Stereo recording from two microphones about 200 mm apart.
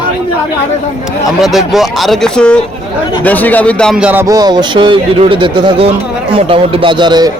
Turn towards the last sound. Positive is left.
turn(degrees=-20)  # may be behind; listen again after turning